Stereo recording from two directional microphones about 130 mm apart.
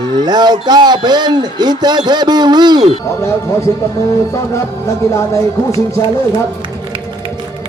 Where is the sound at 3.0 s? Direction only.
20° left (ahead or behind).